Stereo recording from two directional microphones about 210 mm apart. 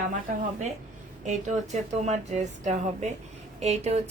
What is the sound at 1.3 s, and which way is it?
Speech, 35° right (ahead or behind).